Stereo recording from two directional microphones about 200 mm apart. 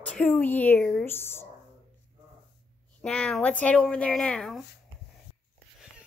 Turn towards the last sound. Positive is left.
turn(degrees=0)  # may be behind; listen again after turning